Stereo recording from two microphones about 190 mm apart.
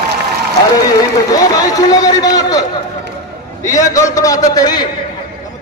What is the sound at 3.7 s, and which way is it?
A man's voice, 15° left (ahead or behind).